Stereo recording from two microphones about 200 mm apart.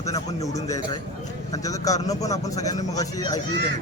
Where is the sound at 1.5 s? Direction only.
15° left (ahead or behind).